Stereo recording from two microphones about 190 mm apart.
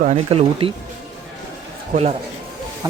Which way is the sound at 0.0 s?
35° right (ahead or behind).